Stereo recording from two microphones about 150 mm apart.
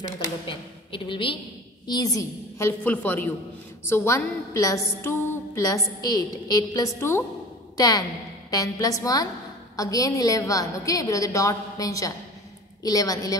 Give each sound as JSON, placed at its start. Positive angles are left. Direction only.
{"t": 0.5, "sound": "a woman's voice", "side_deg": 35}
{"t": 2.8, "sound": "a woman's voice", "side_deg": 10}